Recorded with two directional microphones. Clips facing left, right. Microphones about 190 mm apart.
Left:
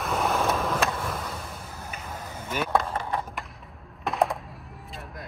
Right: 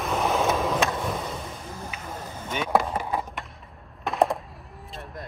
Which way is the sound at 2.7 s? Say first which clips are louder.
Right 3 dB; 10° right (ahead or behind).